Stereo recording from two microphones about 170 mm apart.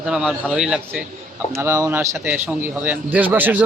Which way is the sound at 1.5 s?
15° right (ahead or behind).